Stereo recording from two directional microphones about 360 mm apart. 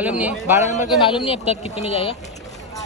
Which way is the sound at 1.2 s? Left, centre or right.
Centre.